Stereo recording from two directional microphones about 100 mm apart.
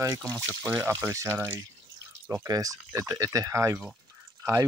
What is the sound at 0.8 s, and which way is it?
Speech, 30° right (ahead or behind).